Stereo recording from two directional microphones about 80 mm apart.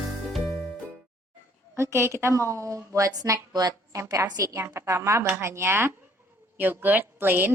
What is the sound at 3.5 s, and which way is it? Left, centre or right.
Speech, right.